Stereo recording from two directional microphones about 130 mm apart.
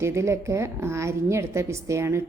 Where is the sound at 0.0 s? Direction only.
20° right (ahead or behind).